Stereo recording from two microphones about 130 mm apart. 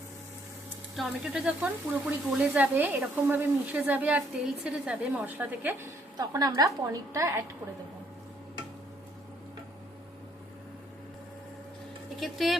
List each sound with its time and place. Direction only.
0.9 s speech: 5° right (ahead or behind)
6.1 s a woman's voice: 30° right (ahead or behind)
12.2 s speech: centre (ahead or behind)